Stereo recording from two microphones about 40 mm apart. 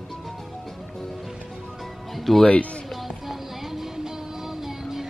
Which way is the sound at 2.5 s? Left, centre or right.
Left.